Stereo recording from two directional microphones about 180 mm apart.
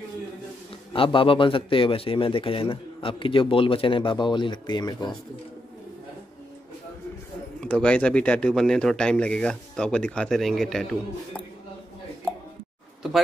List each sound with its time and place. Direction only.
0.9 s a man's voice: 30° left (ahead or behind)
7.6 s speech: 5° left (ahead or behind)